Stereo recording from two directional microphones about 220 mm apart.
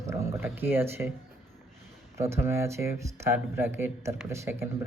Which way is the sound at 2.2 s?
10° right (ahead or behind).